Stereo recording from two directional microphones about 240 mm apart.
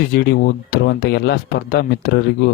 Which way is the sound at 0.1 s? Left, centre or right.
Left.